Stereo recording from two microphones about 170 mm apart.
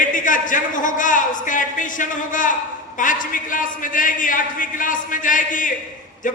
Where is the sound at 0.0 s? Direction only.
50° left (ahead or behind).